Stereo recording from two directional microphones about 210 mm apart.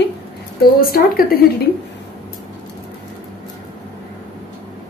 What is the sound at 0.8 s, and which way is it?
Speech, 45° left (ahead or behind).